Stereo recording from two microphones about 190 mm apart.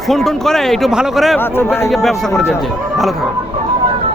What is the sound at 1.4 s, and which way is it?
Speech, 10° left (ahead or behind).